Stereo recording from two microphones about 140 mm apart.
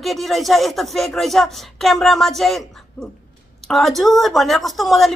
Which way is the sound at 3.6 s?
Centre (ahead or behind).